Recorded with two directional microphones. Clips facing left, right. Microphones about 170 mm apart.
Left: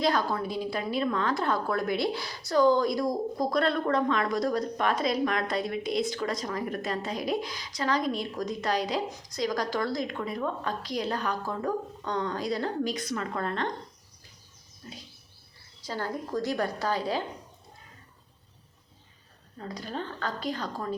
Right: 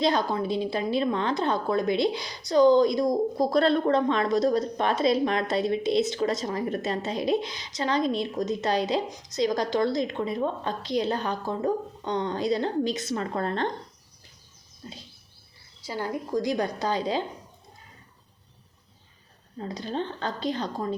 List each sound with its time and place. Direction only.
0.0 s a woman's voice: 20° right (ahead or behind)
14.8 s a woman's voice: 30° right (ahead or behind)
15.9 s a woman's voice: 15° right (ahead or behind)
19.5 s a woman's voice: 25° right (ahead or behind)